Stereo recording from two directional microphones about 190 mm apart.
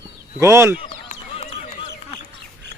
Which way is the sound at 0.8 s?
30° left (ahead or behind).